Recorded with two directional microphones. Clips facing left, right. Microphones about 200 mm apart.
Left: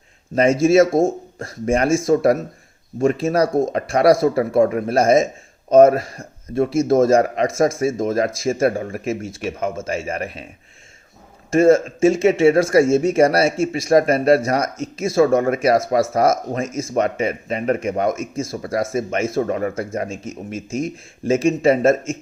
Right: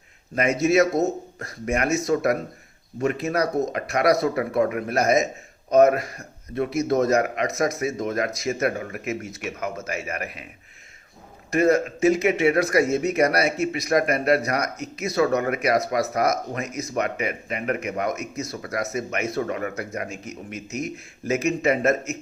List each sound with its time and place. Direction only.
0.3 s speech: 25° left (ahead or behind)
11.5 s speech: 25° left (ahead or behind)